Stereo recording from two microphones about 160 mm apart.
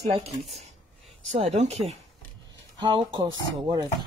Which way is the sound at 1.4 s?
40° right (ahead or behind).